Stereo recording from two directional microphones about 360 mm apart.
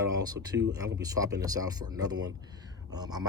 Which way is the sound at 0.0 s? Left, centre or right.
Centre.